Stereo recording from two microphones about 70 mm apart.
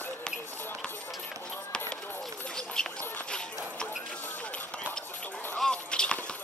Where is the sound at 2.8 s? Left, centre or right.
Centre.